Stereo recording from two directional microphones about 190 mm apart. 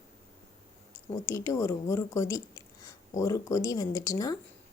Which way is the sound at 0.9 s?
15° left (ahead or behind).